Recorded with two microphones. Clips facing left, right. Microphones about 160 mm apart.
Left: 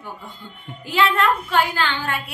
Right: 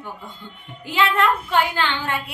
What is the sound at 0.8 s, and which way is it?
A woman's voice, 20° right (ahead or behind).